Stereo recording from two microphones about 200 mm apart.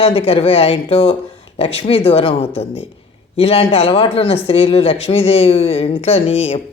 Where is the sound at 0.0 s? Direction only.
30° left (ahead or behind).